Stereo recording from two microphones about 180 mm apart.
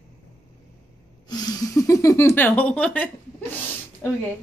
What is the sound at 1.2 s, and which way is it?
Speech, 20° left (ahead or behind).